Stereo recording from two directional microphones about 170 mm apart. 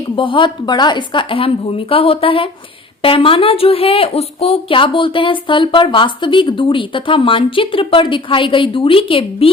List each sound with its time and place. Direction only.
0.2 s a woman's voice: 30° left (ahead or behind)